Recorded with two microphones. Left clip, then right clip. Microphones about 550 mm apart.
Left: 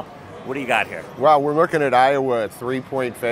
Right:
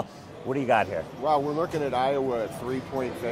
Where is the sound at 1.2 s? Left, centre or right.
Left.